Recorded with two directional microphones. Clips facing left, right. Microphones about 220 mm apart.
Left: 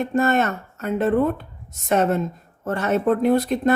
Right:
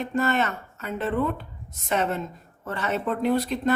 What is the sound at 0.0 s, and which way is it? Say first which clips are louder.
A woman's voice: left 5 dB; 45° left (ahead or behind).